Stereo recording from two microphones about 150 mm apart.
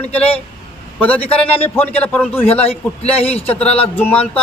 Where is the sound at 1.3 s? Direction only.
40° left (ahead or behind).